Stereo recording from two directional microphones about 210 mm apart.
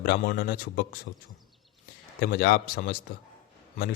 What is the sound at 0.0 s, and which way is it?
A man's voice, 45° left (ahead or behind).